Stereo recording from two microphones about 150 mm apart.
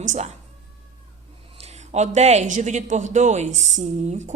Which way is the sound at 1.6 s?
50° right (ahead or behind).